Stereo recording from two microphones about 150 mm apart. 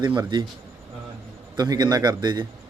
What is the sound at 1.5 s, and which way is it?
Speech, 25° right (ahead or behind).